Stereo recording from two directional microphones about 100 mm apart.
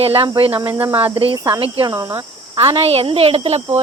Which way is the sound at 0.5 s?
25° right (ahead or behind).